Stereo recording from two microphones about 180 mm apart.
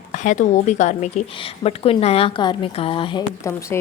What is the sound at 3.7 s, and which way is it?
Speech, 10° left (ahead or behind).